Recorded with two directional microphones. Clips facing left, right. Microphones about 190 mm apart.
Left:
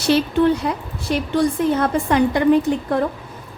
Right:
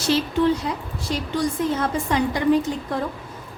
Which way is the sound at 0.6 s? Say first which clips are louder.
Left 4 dB; 60° left (ahead or behind).